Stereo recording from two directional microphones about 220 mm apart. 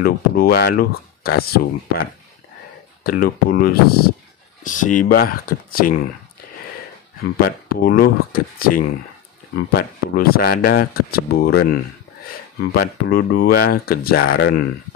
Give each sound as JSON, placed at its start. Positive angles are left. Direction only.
{"t": 0.0, "sound": "speech", "side_deg": 45}
{"t": 7.3, "sound": "speech", "side_deg": 40}
{"t": 14.2, "sound": "speech", "side_deg": 60}